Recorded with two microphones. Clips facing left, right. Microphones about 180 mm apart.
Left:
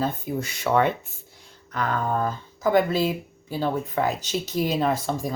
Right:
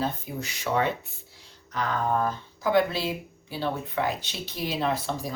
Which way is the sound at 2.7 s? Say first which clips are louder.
Left 3 dB; 45° left (ahead or behind).